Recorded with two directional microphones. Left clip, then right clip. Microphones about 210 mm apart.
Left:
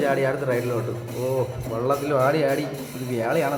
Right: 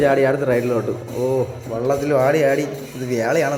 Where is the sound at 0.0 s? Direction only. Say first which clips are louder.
Right 6 dB; 20° right (ahead or behind).